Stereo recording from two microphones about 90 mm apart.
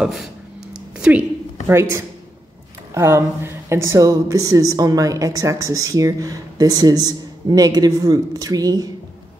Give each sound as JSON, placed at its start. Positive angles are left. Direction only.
{"t": 0.0, "sound": "speech", "side_deg": -5}
{"t": 0.9, "sound": "a sound", "side_deg": -10}
{"t": 1.7, "sound": "speech", "side_deg": -30}